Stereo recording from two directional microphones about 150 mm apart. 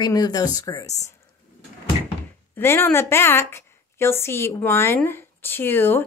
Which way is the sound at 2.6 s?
15° left (ahead or behind).